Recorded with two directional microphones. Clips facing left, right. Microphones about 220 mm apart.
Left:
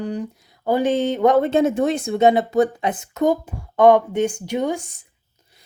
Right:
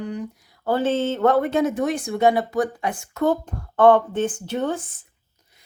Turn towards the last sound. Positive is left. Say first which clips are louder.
# left 2 dB
turn(degrees=10)  # may be behind; listen again after turning